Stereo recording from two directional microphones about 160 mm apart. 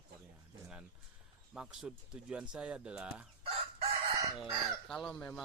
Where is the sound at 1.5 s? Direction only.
5° right (ahead or behind).